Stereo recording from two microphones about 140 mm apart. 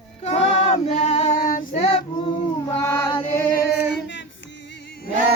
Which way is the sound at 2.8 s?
20° left (ahead or behind).